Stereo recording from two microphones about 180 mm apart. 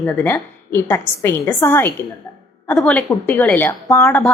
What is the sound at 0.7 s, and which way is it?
A woman's voice, 15° left (ahead or behind).